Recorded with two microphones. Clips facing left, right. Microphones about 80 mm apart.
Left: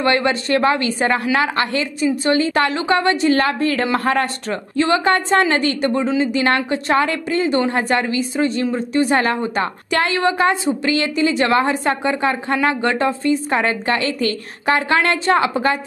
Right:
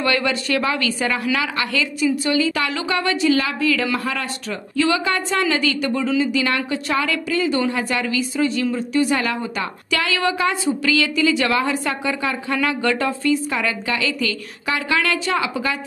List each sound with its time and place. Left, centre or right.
0.0 s speech: left